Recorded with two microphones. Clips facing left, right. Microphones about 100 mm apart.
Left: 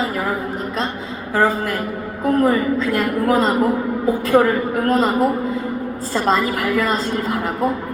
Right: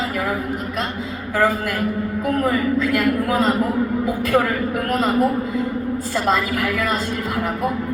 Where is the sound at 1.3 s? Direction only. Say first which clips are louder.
Left 2 dB; 30° left (ahead or behind).